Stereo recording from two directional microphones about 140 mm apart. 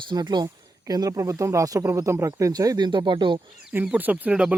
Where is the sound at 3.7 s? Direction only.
10° right (ahead or behind).